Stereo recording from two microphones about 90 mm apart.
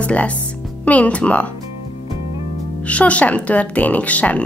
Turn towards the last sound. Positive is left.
turn(degrees=15)  # may be behind; listen again after turning